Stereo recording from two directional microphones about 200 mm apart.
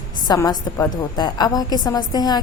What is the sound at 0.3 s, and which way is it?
A woman's voice, 20° left (ahead or behind).